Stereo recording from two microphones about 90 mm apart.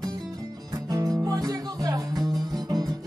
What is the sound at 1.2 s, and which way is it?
Music, 45° right (ahead or behind).